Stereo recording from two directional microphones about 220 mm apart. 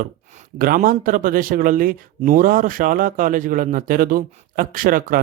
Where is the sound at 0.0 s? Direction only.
35° right (ahead or behind).